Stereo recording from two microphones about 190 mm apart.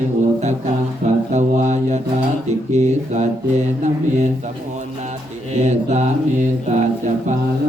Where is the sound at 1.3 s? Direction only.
35° right (ahead or behind).